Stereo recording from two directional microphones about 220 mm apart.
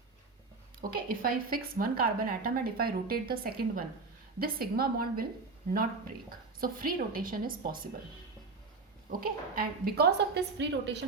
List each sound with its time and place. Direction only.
0.8 s a woman's voice: 40° right (ahead or behind)
9.6 s a woman's voice: 45° right (ahead or behind)